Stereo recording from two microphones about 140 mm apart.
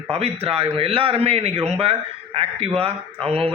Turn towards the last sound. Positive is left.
turn(degrees=-45)  # may be behind; listen again after turning